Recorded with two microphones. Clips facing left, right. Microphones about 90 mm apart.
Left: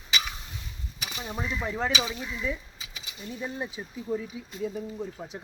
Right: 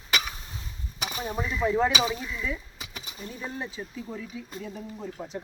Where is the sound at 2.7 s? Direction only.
50° right (ahead or behind).